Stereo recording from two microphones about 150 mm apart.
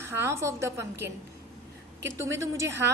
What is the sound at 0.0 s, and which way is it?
A woman's voice, 15° right (ahead or behind).